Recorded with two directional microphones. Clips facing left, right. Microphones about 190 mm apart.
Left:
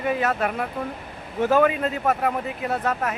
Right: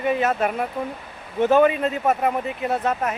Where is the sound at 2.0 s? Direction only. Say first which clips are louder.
Right 2 dB; 5° right (ahead or behind).